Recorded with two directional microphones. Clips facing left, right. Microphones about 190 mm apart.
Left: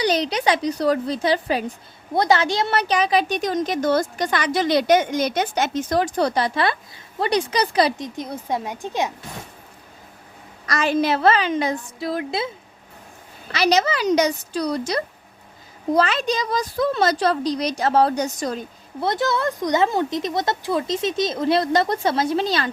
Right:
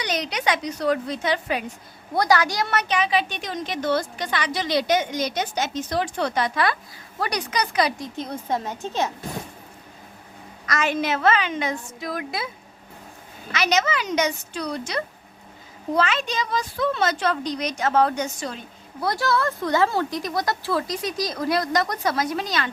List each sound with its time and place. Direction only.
0.0 s a woman's voice: 30° left (ahead or behind)
8.0 s speech: 10° left (ahead or behind)
10.7 s a woman's voice: 35° left (ahead or behind)
13.5 s a woman's voice: 35° left (ahead or behind)
18.9 s speech: 20° left (ahead or behind)